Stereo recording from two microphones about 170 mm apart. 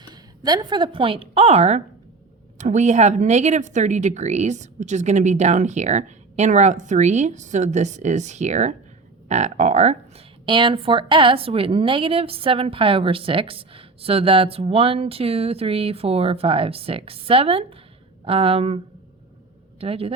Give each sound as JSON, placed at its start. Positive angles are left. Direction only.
{"t": 0.0, "sound": "a woman's voice", "side_deg": -25}
{"t": 10.4, "sound": "a woman's voice", "side_deg": -30}
{"t": 19.8, "sound": "a woman's voice", "side_deg": -35}